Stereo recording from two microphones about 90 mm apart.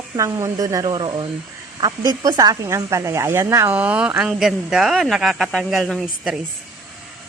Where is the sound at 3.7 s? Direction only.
15° right (ahead or behind).